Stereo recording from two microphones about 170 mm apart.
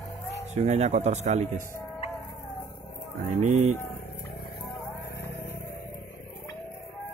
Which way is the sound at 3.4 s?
40° right (ahead or behind).